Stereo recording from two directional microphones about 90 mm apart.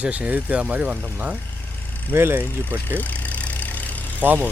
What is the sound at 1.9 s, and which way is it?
Vehicle, 20° left (ahead or behind).